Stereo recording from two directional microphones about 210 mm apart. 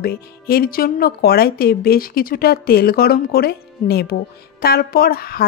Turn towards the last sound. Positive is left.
turn(degrees=45)  # may be behind; listen again after turning